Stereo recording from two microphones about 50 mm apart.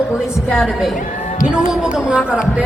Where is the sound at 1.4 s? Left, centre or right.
Centre.